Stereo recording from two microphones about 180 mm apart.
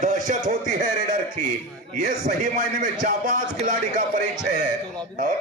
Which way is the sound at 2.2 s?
45° right (ahead or behind).